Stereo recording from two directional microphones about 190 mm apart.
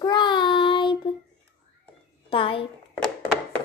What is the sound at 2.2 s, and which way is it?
Speech, 30° left (ahead or behind).